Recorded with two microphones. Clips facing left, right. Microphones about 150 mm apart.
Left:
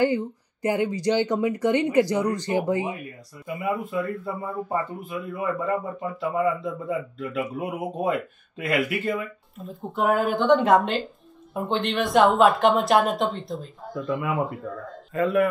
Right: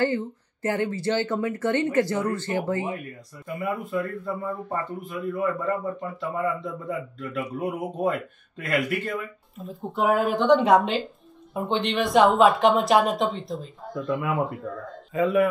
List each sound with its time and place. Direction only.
0.0 s speech: 15° left (ahead or behind)
3.6 s a man's voice: centre (ahead or behind)